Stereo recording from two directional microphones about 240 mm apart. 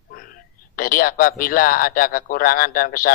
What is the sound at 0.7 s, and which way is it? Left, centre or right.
A man's voice, left.